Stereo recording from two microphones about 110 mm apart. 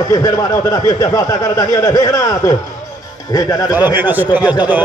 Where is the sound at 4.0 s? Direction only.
15° right (ahead or behind).